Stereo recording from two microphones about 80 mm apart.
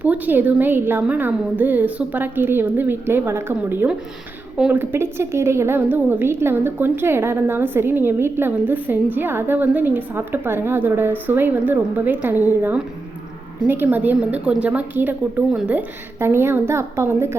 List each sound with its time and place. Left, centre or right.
0.0 s a woman's voice: right